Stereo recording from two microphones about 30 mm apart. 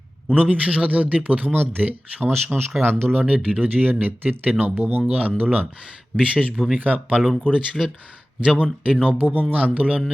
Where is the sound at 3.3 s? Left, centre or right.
Right.